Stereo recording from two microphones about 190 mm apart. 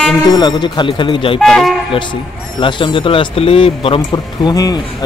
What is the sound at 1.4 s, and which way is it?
Speech, centre (ahead or behind).